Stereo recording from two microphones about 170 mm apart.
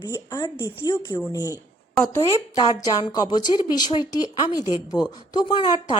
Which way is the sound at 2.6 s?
25° left (ahead or behind).